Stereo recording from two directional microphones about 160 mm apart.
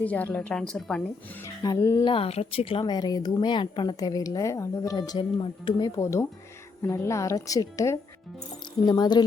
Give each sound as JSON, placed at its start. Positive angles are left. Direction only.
{"t": 0.0, "sound": "a woman's voice", "side_deg": 10}
{"t": 1.6, "sound": "speech", "side_deg": 20}
{"t": 2.0, "sound": "speech", "side_deg": 35}
{"t": 6.0, "sound": "speech", "side_deg": 20}